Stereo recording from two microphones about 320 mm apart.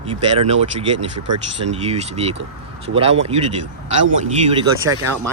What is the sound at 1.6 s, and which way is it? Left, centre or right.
Speech, centre.